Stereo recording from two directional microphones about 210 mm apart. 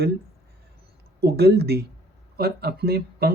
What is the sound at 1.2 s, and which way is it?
Speech, 50° right (ahead or behind).